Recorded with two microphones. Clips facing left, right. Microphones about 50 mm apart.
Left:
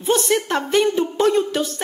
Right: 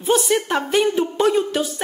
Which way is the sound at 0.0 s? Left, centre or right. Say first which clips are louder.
Even; centre.